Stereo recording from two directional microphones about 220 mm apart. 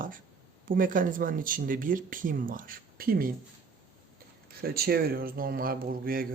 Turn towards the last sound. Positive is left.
turn(degrees=-40)  # may be behind; listen again after turning